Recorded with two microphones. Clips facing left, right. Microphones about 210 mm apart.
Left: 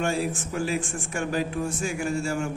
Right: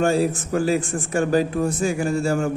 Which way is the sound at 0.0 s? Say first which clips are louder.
Right 7 dB; 35° right (ahead or behind).